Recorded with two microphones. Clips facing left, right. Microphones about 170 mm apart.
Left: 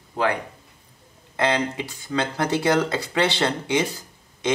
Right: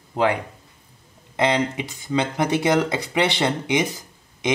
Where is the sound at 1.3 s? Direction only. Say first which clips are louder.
Right 2 dB; 15° right (ahead or behind).